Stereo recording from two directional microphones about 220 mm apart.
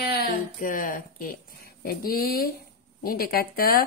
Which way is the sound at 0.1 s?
45° left (ahead or behind).